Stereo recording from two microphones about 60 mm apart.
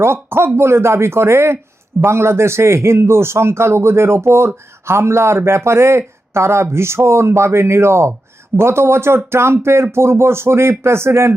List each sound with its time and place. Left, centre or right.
0.0 s a man's voice: right